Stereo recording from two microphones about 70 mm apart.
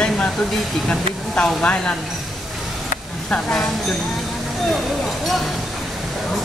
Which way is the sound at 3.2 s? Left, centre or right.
Centre.